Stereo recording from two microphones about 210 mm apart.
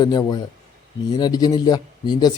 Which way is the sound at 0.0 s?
20° left (ahead or behind).